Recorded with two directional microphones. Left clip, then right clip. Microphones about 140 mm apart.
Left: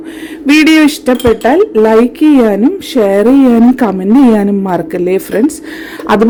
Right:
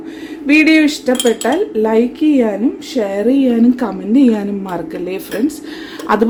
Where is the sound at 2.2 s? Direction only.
90° left.